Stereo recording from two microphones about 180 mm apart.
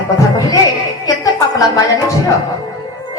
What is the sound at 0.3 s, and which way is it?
Music, 20° left (ahead or behind).